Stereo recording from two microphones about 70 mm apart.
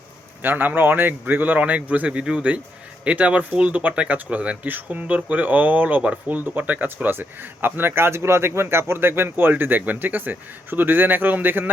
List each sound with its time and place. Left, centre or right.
0.4 s speech: right